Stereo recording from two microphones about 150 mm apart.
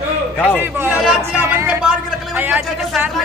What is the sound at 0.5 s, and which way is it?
Speech, 15° right (ahead or behind).